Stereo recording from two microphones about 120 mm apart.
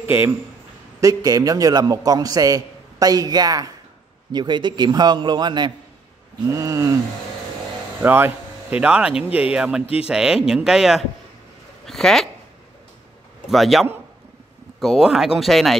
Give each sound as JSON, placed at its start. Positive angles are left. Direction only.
{"t": 0.0, "sound": "speech", "side_deg": -20}
{"t": 1.0, "sound": "a man's voice", "side_deg": -30}
{"t": 6.4, "sound": "a sound", "side_deg": -25}
{"t": 8.0, "sound": "speech", "side_deg": -15}
{"t": 13.5, "sound": "speech", "side_deg": 0}